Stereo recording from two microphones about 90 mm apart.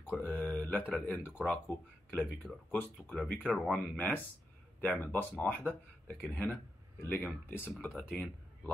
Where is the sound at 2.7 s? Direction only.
15° left (ahead or behind).